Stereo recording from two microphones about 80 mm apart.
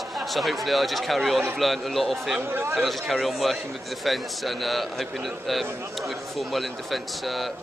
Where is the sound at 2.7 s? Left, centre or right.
Centre.